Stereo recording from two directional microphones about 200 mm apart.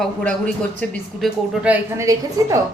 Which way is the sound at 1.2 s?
5° right (ahead or behind).